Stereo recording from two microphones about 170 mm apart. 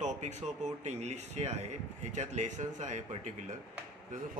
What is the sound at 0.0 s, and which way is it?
Speech, 45° right (ahead or behind).